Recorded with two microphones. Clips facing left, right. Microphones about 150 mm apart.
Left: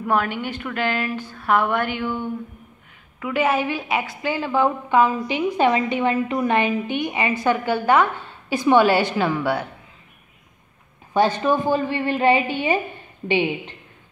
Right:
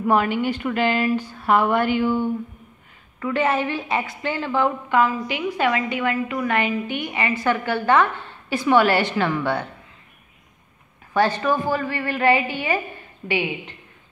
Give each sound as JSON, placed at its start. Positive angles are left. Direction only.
{"t": 0.0, "sound": "a woman's voice", "side_deg": -10}
{"t": 3.2, "sound": "a woman's voice", "side_deg": 10}
{"t": 11.1, "sound": "a woman's voice", "side_deg": 20}